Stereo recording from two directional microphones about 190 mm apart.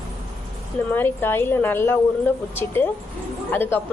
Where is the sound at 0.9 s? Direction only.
10° left (ahead or behind).